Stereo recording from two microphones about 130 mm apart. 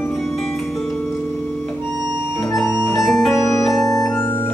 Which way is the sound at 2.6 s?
25° left (ahead or behind).